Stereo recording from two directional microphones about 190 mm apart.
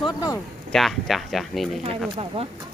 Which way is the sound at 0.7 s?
Centre (ahead or behind).